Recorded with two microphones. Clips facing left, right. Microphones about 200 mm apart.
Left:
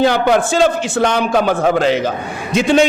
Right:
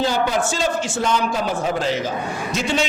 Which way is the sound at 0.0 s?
65° left (ahead or behind).